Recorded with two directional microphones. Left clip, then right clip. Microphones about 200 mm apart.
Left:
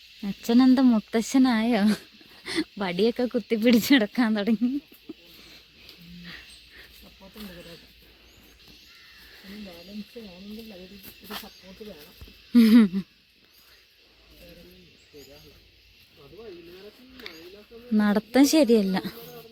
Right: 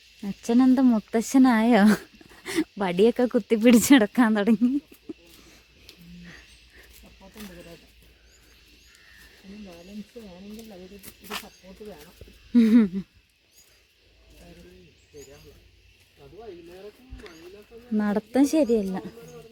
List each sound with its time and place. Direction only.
0.2 s speech: centre (ahead or behind); by 2.0 s 25° right (ahead or behind)
2.4 s speech: 10° right (ahead or behind)
6.2 s dog: centre (ahead or behind)
11.3 s speech: 15° right (ahead or behind)
12.5 s speech: centre (ahead or behind)
17.9 s speech: 5° left (ahead or behind)